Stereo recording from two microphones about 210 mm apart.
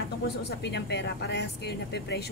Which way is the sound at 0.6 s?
55° left (ahead or behind).